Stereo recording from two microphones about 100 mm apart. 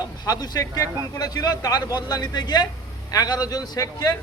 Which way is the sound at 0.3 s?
40° left (ahead or behind).